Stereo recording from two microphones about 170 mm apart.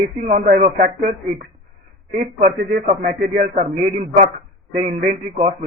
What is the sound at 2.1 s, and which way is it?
A man's voice, 50° right (ahead or behind).